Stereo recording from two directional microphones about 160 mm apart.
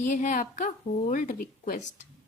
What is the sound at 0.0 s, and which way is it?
A woman's voice, 50° left (ahead or behind).